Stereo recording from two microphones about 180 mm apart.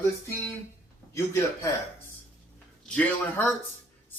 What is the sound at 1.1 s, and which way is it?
Speech, 15° left (ahead or behind).